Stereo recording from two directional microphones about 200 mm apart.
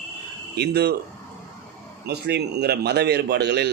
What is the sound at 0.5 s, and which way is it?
Speech, 55° right (ahead or behind).